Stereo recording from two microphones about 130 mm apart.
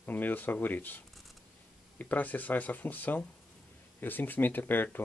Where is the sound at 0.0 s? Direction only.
15° left (ahead or behind).